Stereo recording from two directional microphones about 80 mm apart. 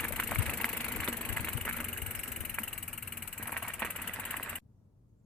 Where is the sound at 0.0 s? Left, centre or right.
Centre.